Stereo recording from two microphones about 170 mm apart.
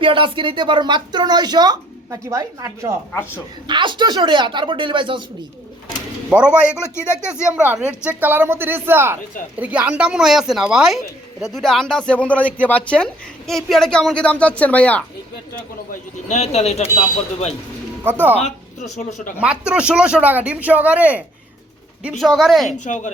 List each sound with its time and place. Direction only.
0.0 s speech: 30° right (ahead or behind)
3.1 s speech: 10° left (ahead or behind)
3.7 s speech: 30° right (ahead or behind)
6.3 s speech: 5° right (ahead or behind)
6.9 s speech: 15° left (ahead or behind)
7.5 s a woman's voice: 10° right (ahead or behind); by 15.0 s 10° left (ahead or behind)
15.9 s speech: 40° left (ahead or behind)
18.0 s speech: 10° right (ahead or behind)
18.3 s speech: 40° left (ahead or behind)
19.4 s a woman's voice: 5° right (ahead or behind)
22.8 s speech: 45° left (ahead or behind)